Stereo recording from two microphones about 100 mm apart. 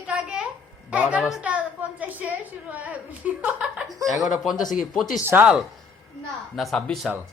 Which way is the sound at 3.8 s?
Centre (ahead or behind).